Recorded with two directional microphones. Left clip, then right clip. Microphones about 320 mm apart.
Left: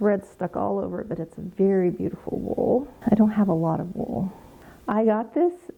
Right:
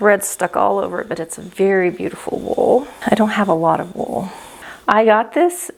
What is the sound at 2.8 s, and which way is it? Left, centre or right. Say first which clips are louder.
Speech: right 7 dB; centre.